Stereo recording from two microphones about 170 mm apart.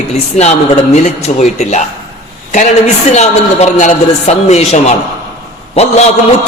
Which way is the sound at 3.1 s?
40° left (ahead or behind).